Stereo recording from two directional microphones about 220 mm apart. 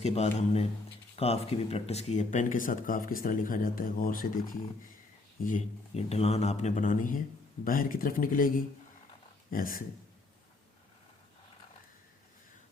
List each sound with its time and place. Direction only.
0.0 s speech: 30° left (ahead or behind)